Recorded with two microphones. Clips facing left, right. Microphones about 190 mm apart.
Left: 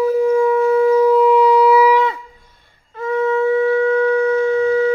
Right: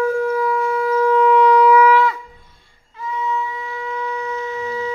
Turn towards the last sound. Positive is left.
turn(degrees=55)  # may be behind; listen again after turning